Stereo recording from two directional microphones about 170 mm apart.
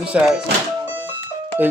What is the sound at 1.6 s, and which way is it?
Speech, 10° right (ahead or behind).